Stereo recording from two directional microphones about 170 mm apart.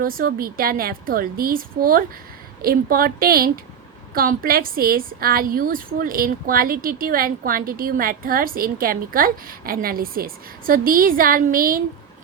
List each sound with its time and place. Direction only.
0.0 s a woman's voice: 60° right (ahead or behind)